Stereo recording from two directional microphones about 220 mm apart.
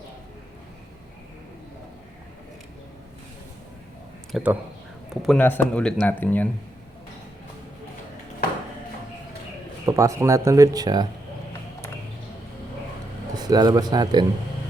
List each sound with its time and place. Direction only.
4.3 s speech: centre (ahead or behind)
9.8 s speech: 15° right (ahead or behind)
13.3 s a man's voice: 15° right (ahead or behind)